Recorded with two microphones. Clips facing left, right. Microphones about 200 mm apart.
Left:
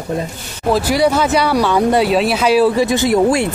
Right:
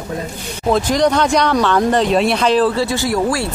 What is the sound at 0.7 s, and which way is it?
Speech, 10° left (ahead or behind).